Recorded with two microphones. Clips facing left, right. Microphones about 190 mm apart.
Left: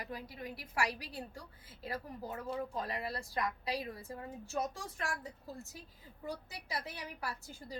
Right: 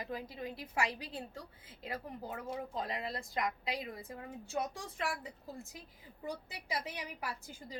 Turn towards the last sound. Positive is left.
turn(degrees=-15)  # may be behind; listen again after turning